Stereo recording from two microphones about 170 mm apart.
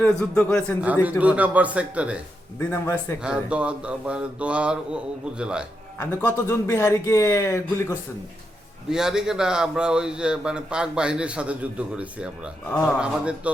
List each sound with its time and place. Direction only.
0.0 s a man's voice: 5° left (ahead or behind)
1.2 s mantra: 10° right (ahead or behind)
2.6 s a man's voice: 15° left (ahead or behind)
3.2 s mantra: 5° right (ahead or behind)
5.4 s speech: 5° right (ahead or behind)
6.0 s a man's voice: 15° left (ahead or behind)
8.9 s speech: 5° right (ahead or behind)
13.0 s mantra: 5° right (ahead or behind)